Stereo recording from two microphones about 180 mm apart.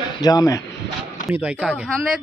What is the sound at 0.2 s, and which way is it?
Speech, 20° left (ahead or behind).